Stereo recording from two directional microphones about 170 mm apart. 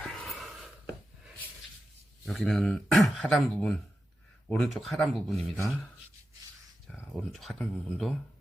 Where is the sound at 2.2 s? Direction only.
Centre (ahead or behind).